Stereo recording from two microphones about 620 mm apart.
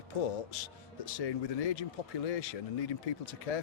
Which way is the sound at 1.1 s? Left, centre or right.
Left.